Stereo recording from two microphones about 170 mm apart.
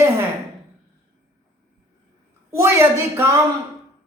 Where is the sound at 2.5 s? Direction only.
15° right (ahead or behind).